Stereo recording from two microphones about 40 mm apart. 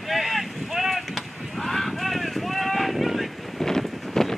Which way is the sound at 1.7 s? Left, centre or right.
Centre.